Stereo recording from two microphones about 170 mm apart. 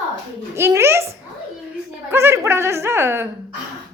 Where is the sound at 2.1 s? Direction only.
15° right (ahead or behind).